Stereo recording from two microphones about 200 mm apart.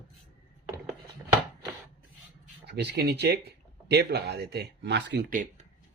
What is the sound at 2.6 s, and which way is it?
Speech, 55° right (ahead or behind).